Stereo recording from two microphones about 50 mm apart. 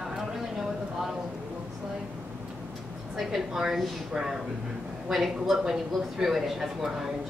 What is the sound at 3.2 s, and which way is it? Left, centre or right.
A woman's voice, centre.